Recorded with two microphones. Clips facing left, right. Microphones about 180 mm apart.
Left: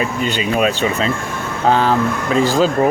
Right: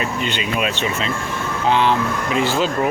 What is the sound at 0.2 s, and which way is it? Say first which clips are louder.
Speech: left 5 dB; 40° left (ahead or behind).